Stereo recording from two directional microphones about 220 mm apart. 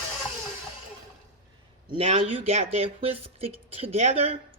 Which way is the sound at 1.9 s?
30° right (ahead or behind).